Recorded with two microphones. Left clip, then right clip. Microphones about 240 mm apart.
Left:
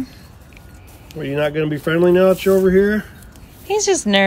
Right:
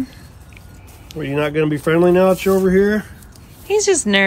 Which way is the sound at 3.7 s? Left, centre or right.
Centre.